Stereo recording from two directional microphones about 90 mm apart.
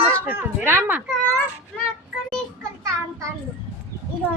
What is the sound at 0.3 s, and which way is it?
Speech, 20° right (ahead or behind).